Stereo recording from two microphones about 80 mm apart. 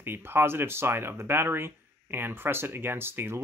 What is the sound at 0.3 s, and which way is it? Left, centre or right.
Speech, right.